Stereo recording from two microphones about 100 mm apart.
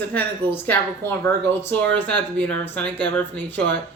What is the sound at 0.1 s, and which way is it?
Speech, 20° left (ahead or behind).